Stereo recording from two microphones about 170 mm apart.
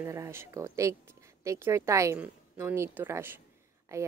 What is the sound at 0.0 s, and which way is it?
A woman's voice, 15° right (ahead or behind).